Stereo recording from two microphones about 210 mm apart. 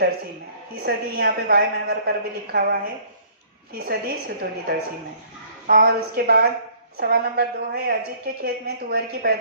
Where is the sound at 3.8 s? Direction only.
50° right (ahead or behind).